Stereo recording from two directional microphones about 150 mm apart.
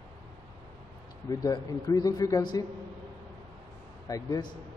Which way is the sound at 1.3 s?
25° left (ahead or behind).